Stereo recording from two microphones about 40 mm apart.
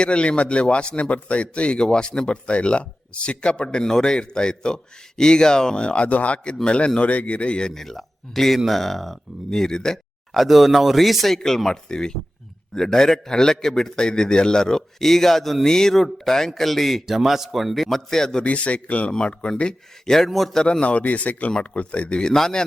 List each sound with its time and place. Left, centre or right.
0.0 s speech: left
7.7 s speech: centre
9.5 s a man's voice: centre
10.3 s a man's voice: centre
17.1 s speech: centre
18.4 s speech: left
20.1 s a man's voice: centre
20.6 s speech: centre
20.8 s speech: left
22.4 s a man's voice: centre